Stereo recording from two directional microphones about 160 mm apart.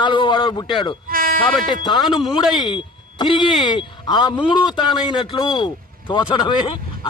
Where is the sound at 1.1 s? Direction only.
60° right (ahead or behind).